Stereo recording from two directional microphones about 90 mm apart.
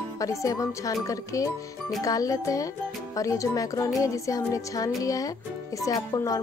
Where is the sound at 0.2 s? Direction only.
35° left (ahead or behind).